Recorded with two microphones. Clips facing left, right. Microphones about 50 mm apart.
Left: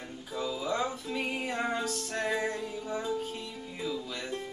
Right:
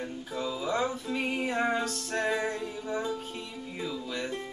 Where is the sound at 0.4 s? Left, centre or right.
Centre.